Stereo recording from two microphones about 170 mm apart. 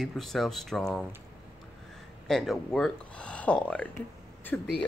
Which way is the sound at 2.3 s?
Centre (ahead or behind).